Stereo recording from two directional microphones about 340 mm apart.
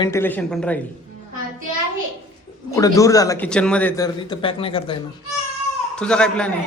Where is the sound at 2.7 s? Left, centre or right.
Centre.